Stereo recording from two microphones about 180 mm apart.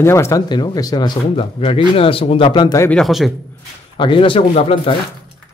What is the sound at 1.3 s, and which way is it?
Speech, 30° left (ahead or behind).